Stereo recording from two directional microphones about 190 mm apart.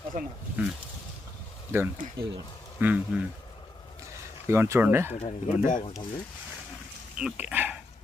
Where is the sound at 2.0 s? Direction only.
55° right (ahead or behind).